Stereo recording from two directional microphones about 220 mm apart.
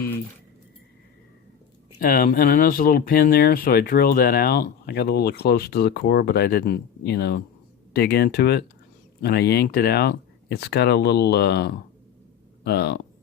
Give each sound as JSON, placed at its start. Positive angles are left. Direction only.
{"t": 2.0, "sound": "speech", "side_deg": 40}